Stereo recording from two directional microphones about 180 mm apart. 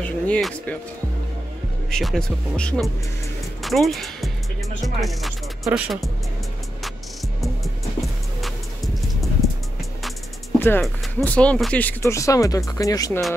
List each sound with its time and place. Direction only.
0.0 s speech: 5° left (ahead or behind)
1.9 s speech: centre (ahead or behind)
4.8 s music: centre (ahead or behind)
8.4 s music: centre (ahead or behind)
10.6 s speech: 10° left (ahead or behind)